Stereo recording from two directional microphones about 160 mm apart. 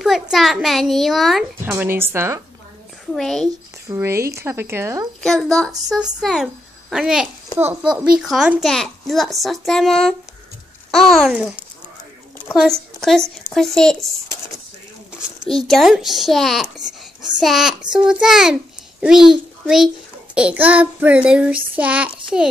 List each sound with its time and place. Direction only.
0.0 s a child's voice: centre (ahead or behind)
1.6 s child singing: 10° right (ahead or behind)
3.2 s a child's voice: centre (ahead or behind)
3.9 s child singing: 15° right (ahead or behind)
5.2 s a child's voice: centre (ahead or behind)
15.1 s a child's voice: centre (ahead or behind)
20.3 s child singing: 10° right (ahead or behind)